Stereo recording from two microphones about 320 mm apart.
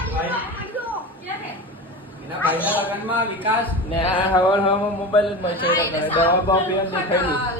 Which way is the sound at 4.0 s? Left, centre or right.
Centre.